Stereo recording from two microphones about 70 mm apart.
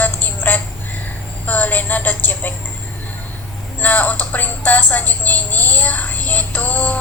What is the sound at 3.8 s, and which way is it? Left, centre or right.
Music, left.